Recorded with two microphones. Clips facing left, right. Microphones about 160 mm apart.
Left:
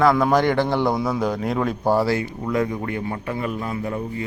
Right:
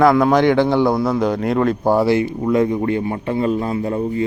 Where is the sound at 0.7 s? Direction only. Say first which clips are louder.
Right 5 dB; 10° right (ahead or behind).